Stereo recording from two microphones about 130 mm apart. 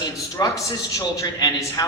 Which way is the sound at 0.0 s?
25° left (ahead or behind).